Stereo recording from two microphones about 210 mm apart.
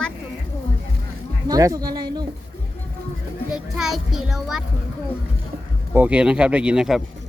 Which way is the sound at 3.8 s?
Centre (ahead or behind).